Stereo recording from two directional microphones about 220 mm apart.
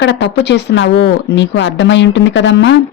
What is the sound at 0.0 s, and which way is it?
Speech, 50° left (ahead or behind).